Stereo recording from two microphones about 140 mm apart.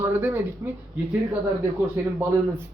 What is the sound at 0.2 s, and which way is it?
Speech, 15° right (ahead or behind).